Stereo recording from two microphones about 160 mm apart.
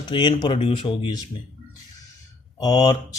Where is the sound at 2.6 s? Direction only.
25° left (ahead or behind).